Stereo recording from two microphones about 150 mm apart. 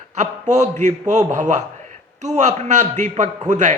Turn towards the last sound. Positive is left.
turn(degrees=-55)  # may be behind; listen again after turning